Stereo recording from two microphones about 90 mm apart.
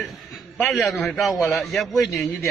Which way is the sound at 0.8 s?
Centre (ahead or behind).